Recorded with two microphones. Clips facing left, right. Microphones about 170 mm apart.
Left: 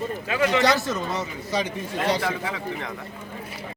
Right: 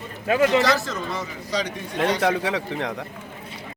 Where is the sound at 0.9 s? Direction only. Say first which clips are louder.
Left 1 dB; 20° left (ahead or behind).